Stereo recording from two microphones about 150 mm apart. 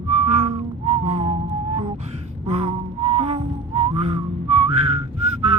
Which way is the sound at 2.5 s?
40° right (ahead or behind).